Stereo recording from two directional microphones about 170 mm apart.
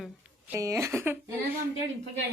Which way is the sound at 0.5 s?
15° right (ahead or behind).